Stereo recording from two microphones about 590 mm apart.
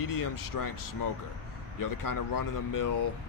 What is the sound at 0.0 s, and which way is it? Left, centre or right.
Speech, left.